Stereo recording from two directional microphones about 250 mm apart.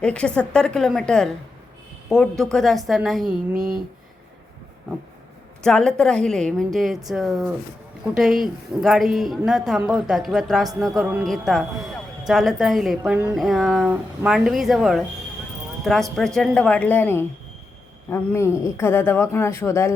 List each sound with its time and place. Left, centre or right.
0.0 s a woman's voice: centre
3.5 s speech: right
5.6 s a woman's voice: centre